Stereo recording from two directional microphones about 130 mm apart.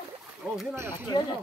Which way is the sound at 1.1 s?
35° left (ahead or behind).